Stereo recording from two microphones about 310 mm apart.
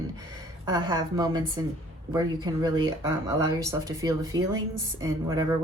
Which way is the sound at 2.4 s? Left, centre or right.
Centre.